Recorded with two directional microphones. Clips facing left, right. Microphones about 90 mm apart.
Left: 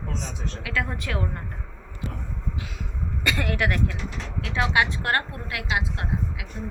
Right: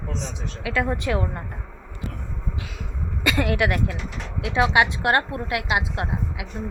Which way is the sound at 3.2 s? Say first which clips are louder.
Right 4 dB; 10° right (ahead or behind).